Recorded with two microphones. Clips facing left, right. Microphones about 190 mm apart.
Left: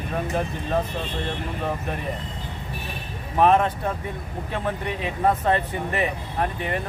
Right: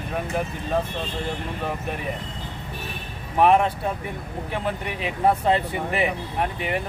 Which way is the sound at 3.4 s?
15° right (ahead or behind).